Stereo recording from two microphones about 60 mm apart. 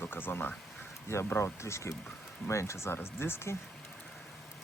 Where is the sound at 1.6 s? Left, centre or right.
Left.